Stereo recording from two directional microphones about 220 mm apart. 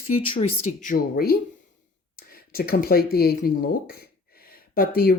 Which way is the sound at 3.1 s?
45° left (ahead or behind).